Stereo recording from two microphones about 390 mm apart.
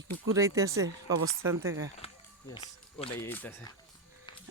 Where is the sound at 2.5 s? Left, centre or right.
Centre.